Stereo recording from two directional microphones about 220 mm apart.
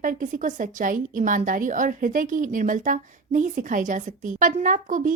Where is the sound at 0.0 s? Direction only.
35° right (ahead or behind).